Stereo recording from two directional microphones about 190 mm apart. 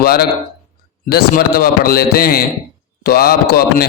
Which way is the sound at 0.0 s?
50° left (ahead or behind).